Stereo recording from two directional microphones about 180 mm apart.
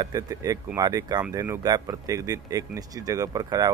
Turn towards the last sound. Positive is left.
turn(degrees=-20)  # may be behind; listen again after turning